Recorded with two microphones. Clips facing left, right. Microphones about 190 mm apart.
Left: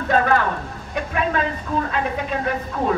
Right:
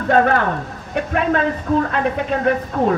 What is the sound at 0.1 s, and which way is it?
Speech, 55° right (ahead or behind).